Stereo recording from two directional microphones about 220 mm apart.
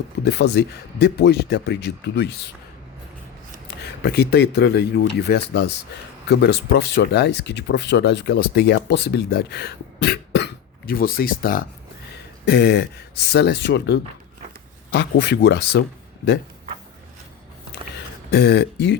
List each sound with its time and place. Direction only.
0.3 s speech: 50° left (ahead or behind)
4.0 s speech: 50° left (ahead or behind)
18.3 s speech: 50° left (ahead or behind)